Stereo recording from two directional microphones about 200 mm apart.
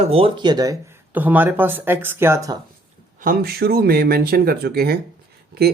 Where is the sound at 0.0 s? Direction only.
30° right (ahead or behind).